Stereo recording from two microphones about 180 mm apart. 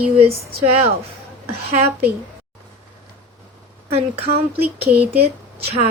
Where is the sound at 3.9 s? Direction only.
35° right (ahead or behind).